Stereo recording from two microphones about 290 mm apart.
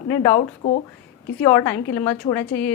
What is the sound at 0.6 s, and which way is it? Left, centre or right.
Speech, left.